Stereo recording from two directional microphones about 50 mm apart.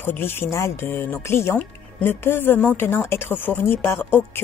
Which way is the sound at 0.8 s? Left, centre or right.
Left.